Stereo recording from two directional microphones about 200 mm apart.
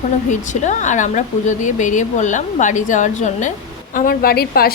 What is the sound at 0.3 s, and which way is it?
A woman's voice, 40° left (ahead or behind).